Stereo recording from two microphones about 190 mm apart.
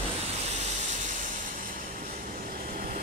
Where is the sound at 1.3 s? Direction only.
45° right (ahead or behind).